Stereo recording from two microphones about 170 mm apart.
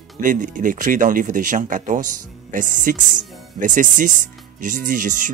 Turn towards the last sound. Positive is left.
turn(degrees=-50)  # may be behind; listen again after turning